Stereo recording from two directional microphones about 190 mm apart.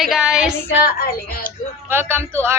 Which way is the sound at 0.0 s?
Centre (ahead or behind).